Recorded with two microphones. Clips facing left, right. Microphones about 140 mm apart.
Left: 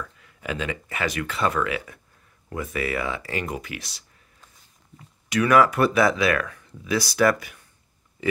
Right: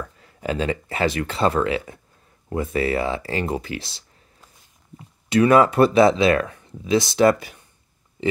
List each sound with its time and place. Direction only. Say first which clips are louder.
0.0 s speech: right 6 dB; 35° right (ahead or behind)